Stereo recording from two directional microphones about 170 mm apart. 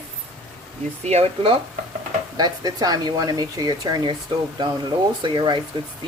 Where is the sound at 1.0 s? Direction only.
40° right (ahead or behind).